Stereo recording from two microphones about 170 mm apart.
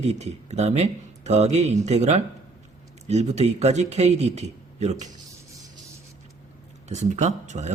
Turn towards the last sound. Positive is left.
turn(degrees=-45)  # may be behind; listen again after turning